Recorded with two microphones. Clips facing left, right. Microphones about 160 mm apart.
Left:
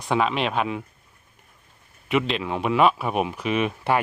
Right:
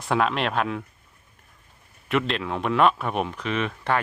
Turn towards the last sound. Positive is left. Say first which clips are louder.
# left 3 dB
turn(degrees=15)  # may be behind; listen again after turning